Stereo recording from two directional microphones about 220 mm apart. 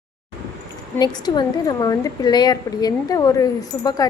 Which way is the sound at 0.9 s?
20° left (ahead or behind).